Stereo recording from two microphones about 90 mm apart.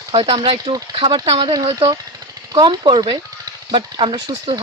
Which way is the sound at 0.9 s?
75° right (ahead or behind).